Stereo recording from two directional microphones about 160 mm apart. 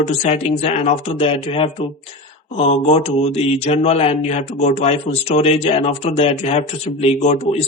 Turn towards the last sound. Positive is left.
turn(degrees=40)  # may be behind; listen again after turning